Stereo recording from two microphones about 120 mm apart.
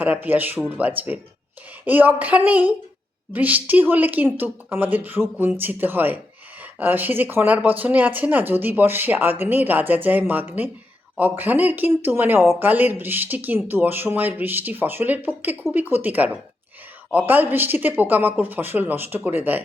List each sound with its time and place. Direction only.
0.0 s speech: 15° right (ahead or behind)